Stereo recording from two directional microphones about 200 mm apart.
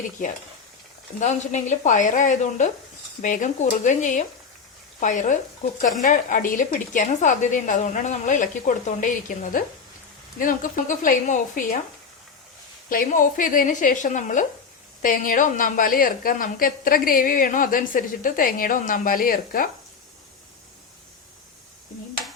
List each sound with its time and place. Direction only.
1.2 s a woman's voice: 35° left (ahead or behind)
12.9 s a woman's voice: 45° left (ahead or behind)